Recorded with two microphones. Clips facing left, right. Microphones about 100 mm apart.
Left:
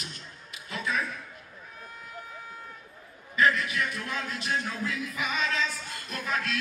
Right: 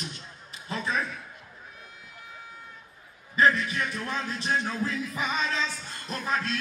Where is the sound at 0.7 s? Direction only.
35° right (ahead or behind).